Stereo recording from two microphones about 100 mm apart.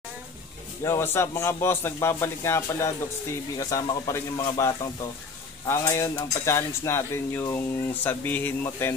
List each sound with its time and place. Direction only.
0.8 s a man's voice: 25° left (ahead or behind)